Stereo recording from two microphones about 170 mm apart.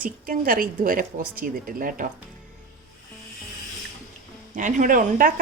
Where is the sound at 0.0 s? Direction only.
55° right (ahead or behind).